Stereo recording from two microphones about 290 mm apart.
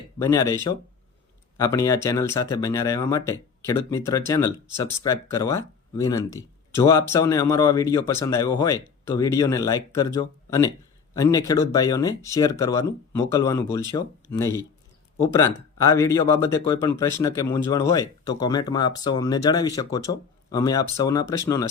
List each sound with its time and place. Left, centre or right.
0.2 s speech: centre